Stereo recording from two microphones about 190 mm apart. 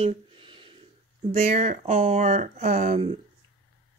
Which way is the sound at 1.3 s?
35° right (ahead or behind).